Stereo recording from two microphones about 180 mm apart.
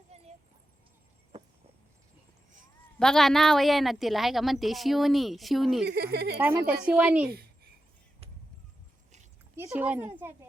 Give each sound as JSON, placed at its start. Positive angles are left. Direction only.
{"t": 0.1, "sound": "a sound", "side_deg": -35}
{"t": 3.0, "sound": "a woman's voice", "side_deg": 5}
{"t": 5.9, "sound": "speech", "side_deg": -60}
{"t": 6.7, "sound": "speech", "side_deg": -5}
{"t": 7.3, "sound": "a sound", "side_deg": -60}
{"t": 9.6, "sound": "speech", "side_deg": -10}